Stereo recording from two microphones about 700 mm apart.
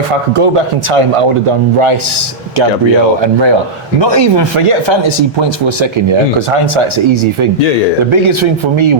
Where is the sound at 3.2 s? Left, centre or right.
Right.